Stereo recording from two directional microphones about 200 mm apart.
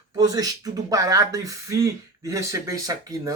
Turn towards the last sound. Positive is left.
turn(degrees=-15)  # may be behind; listen again after turning